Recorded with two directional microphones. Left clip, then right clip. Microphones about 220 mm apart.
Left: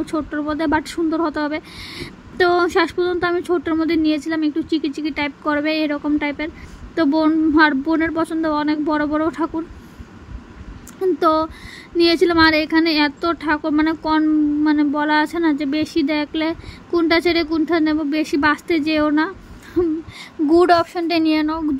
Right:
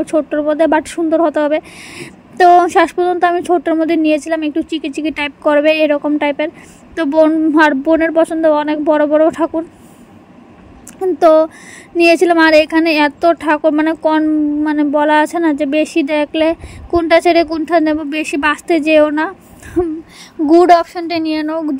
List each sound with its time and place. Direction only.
0.0 s a woman's voice: 10° right (ahead or behind)
11.0 s a woman's voice: 10° right (ahead or behind)